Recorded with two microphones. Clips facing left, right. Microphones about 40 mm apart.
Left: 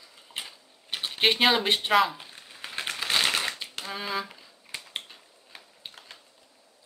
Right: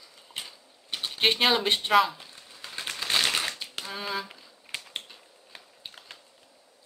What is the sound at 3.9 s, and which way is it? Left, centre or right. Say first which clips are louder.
Speech: left 2 dB; centre.